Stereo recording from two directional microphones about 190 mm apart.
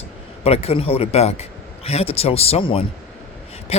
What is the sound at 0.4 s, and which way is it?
A man's voice, 30° left (ahead or behind).